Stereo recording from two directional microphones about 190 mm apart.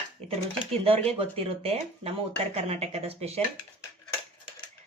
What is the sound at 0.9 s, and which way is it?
Speech, 30° right (ahead or behind).